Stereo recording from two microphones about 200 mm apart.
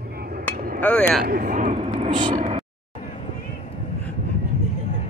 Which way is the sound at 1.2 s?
45° right (ahead or behind).